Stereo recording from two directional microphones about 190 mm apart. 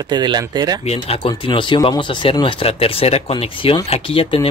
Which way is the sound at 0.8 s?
30° left (ahead or behind).